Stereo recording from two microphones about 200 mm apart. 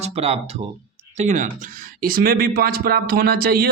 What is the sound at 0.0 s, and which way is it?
Speech, 30° right (ahead or behind).